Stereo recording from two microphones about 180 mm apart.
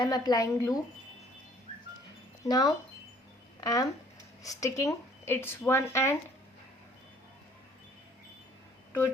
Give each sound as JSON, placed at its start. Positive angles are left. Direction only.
{"t": 0.0, "sound": "speech", "side_deg": 20}
{"t": 2.4, "sound": "speech", "side_deg": 20}